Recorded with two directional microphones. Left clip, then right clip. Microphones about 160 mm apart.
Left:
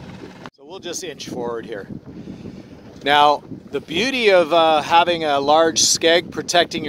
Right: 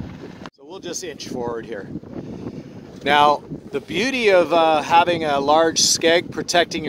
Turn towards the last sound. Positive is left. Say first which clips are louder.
# left 1 dB
turn(degrees=15)  # may be behind; listen again after turning